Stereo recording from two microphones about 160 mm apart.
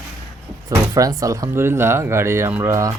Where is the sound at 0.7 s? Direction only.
20° right (ahead or behind).